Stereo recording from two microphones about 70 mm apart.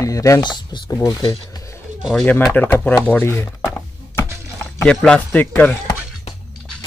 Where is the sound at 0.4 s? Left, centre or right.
Left.